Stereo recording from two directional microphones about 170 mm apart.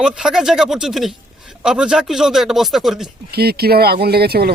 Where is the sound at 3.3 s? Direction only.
70° right (ahead or behind).